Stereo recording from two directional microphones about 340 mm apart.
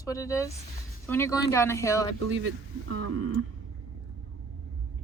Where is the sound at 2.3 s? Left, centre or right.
Right.